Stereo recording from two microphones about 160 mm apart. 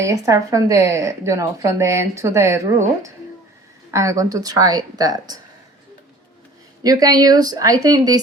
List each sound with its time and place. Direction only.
0.0 s speech: 20° right (ahead or behind)
6.8 s speech: 25° right (ahead or behind)